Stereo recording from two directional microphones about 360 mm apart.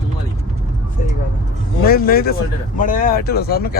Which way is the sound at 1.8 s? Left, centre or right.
Left.